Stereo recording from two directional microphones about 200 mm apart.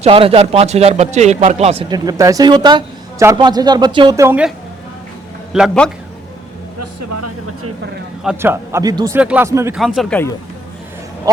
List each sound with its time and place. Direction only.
0.0 s speech: 30° right (ahead or behind); by 4.5 s 10° right (ahead or behind)
5.5 s speech: centre (ahead or behind)
8.2 s speech: 5° right (ahead or behind)
9.7 s speech: centre (ahead or behind)